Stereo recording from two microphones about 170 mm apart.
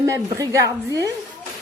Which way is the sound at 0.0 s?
20° right (ahead or behind).